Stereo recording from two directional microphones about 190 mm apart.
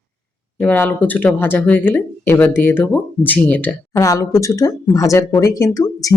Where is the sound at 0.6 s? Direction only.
10° left (ahead or behind).